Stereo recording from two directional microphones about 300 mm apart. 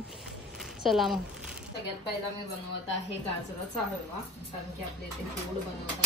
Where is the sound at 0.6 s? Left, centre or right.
Centre.